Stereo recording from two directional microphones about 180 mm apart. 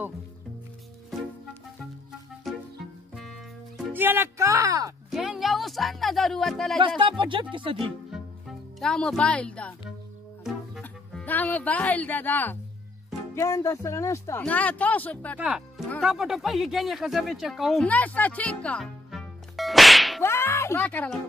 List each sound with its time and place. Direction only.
2.4 s music: centre (ahead or behind)
3.9 s speech: 10° right (ahead or behind)
5.1 s music: centre (ahead or behind)
7.0 s speech: 25° right (ahead or behind)
8.1 s music: centre (ahead or behind)
10.4 s speech: centre (ahead or behind)
15.3 s speech: 5° right (ahead or behind)
20.2 s music: 15° left (ahead or behind)